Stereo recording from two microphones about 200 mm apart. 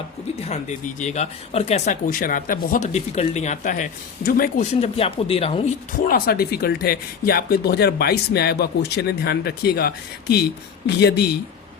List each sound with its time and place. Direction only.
0.4 s speech: 35° left (ahead or behind)
6.1 s speech: 45° left (ahead or behind)